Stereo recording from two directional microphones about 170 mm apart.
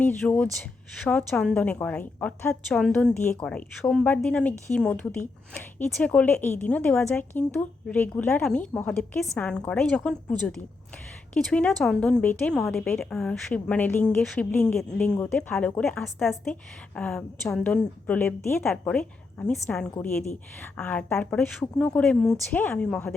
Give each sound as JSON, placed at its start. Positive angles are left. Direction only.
{"t": 0.0, "sound": "a woman's voice", "side_deg": 10}